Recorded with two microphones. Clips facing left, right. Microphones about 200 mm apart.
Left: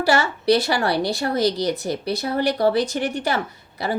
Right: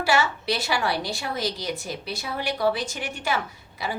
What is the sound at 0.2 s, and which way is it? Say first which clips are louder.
Speech: left 7 dB; 65° left (ahead or behind).